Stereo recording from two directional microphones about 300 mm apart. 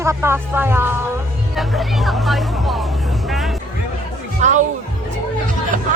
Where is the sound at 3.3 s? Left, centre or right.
Centre.